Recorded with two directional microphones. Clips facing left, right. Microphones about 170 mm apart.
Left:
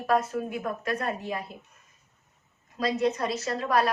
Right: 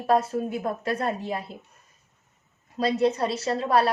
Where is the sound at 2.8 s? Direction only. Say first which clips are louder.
Right 3 dB; 30° right (ahead or behind).